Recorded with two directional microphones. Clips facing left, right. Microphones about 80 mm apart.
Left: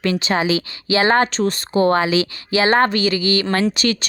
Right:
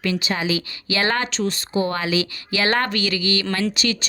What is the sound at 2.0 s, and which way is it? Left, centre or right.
A woman's voice, left.